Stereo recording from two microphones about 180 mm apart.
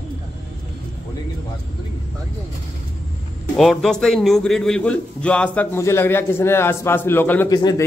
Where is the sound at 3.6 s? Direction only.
Centre (ahead or behind).